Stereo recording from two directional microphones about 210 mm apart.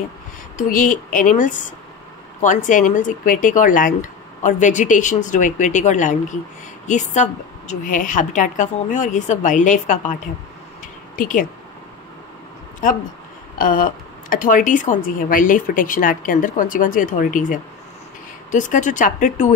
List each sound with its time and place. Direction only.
0.6 s speech: 40° left (ahead or behind)
11.1 s speech: 40° left (ahead or behind)
12.8 s speech: 40° left (ahead or behind)